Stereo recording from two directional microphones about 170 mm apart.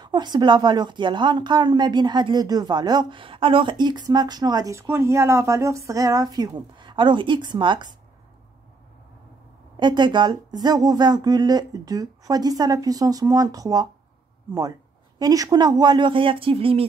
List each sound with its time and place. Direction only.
0.0 s speech: 25° right (ahead or behind)
9.8 s speech: 25° right (ahead or behind)
15.1 s speech: 20° right (ahead or behind)